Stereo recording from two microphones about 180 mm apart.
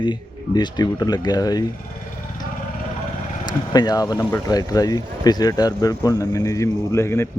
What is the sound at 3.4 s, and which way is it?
Speech, 20° left (ahead or behind).